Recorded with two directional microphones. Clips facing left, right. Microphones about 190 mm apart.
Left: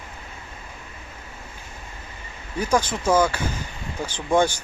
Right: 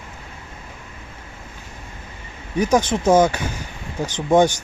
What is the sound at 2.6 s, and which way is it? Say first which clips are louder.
Speech: right 5 dB; 20° right (ahead or behind).